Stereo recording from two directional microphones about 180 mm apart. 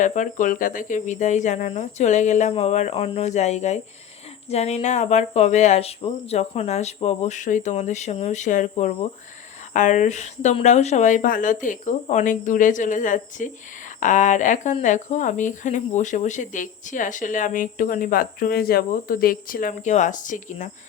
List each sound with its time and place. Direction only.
0.0 s speech: 45° left (ahead or behind)